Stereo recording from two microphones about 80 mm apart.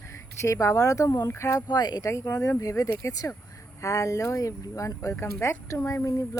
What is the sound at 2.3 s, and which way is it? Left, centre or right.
Speech, left.